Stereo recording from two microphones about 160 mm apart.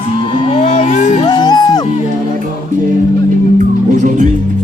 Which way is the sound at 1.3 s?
25° left (ahead or behind).